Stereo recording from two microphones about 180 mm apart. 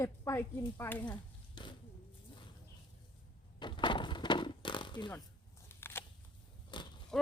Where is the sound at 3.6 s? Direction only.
25° left (ahead or behind).